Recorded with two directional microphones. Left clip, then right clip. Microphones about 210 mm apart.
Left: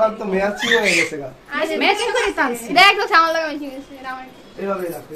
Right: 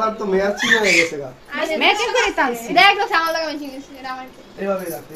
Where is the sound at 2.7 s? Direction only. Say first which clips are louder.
Left 2 dB; 25° left (ahead or behind).